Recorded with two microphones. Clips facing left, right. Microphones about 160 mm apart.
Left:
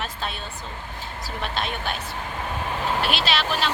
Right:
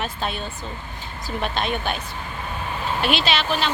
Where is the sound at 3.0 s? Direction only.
Centre (ahead or behind).